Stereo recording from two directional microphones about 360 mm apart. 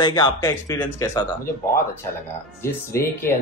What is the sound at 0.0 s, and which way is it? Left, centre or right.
Speech, centre.